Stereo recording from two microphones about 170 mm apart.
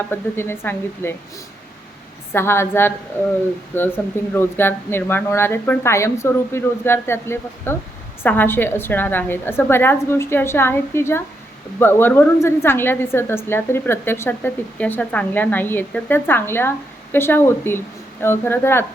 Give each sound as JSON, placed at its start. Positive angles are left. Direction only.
{"t": 0.1, "sound": "a woman's voice", "side_deg": 15}
{"t": 2.3, "sound": "a woman's voice", "side_deg": 15}